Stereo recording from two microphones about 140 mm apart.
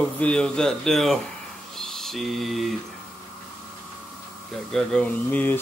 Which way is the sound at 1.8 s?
5° left (ahead or behind).